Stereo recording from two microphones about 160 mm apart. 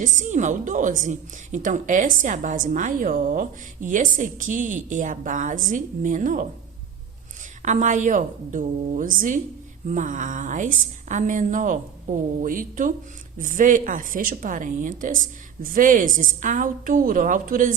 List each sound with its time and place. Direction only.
0.2 s a woman's voice: 50° right (ahead or behind)
7.6 s a woman's voice: 50° right (ahead or behind)